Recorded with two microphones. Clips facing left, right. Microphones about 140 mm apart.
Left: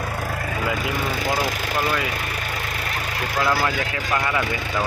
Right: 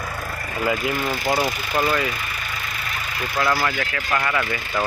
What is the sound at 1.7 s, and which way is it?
Speech, centre (ahead or behind).